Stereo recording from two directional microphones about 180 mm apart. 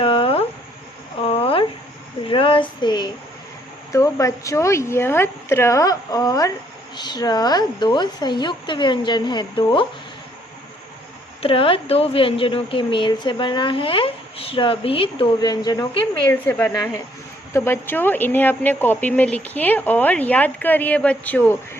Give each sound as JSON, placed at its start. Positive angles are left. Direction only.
{"t": 0.0, "sound": "a sound", "side_deg": 30}
{"t": 2.2, "sound": "speech", "side_deg": 30}
{"t": 11.4, "sound": "speech", "side_deg": 30}